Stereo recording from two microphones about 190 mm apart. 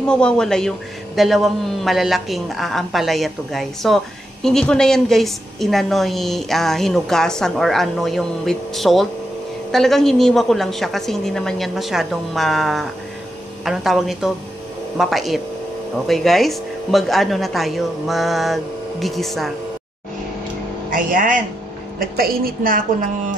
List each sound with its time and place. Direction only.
0.1 s a man's voice: 5° left (ahead or behind)
20.9 s a woman's voice: 45° right (ahead or behind)